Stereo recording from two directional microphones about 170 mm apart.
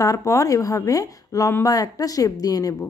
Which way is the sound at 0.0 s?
20° left (ahead or behind).